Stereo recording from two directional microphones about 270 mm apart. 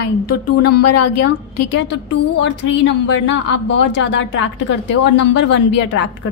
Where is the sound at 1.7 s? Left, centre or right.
Left.